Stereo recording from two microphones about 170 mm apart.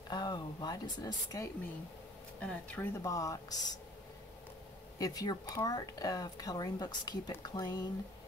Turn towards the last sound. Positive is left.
turn(degrees=25)  # may be behind; listen again after turning